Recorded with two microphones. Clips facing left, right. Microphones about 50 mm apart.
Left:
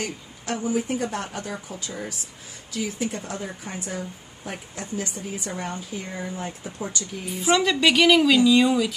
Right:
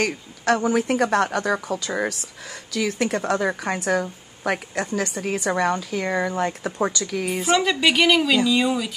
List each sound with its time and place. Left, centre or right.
0.0 s a woman's voice: right
7.4 s a woman's voice: centre